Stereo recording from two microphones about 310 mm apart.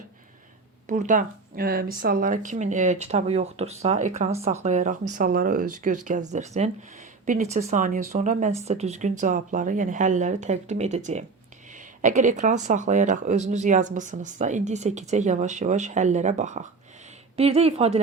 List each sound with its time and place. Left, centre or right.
0.9 s speech: right